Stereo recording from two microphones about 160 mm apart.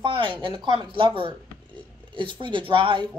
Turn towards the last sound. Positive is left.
turn(degrees=-30)  # may be behind; listen again after turning